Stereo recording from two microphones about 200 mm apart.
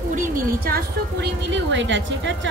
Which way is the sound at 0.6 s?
55° right (ahead or behind).